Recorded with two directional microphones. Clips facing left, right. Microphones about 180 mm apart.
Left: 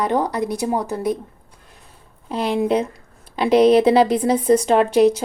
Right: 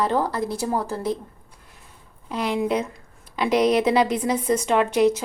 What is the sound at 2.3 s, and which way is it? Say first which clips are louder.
Speech: left 4 dB; 30° left (ahead or behind).